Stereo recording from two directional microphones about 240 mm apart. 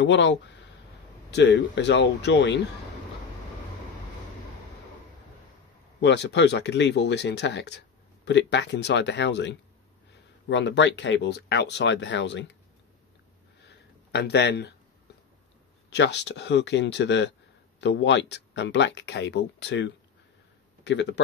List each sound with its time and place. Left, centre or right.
0.0 s speech: left
5.9 s speech: left
13.6 s a sound: left
15.9 s speech: left